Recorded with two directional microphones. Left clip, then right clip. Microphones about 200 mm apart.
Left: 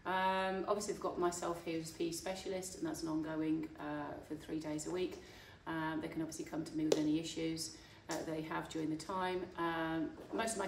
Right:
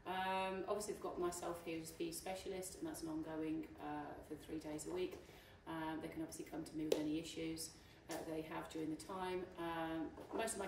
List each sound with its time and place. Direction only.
0.0 s speech: 15° left (ahead or behind)